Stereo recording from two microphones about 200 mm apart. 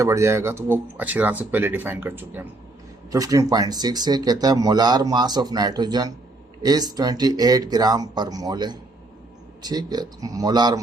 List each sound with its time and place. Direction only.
0.0 s speech: 15° right (ahead or behind)